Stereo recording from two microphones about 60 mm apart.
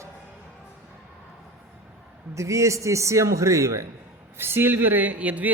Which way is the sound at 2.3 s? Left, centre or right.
Right.